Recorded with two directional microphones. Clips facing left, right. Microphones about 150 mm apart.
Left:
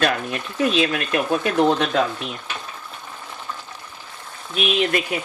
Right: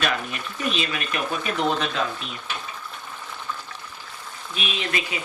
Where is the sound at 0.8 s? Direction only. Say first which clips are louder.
Left 7 dB; 55° left (ahead or behind).